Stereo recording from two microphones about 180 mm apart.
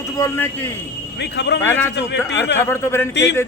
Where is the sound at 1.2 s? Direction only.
75° left (ahead or behind).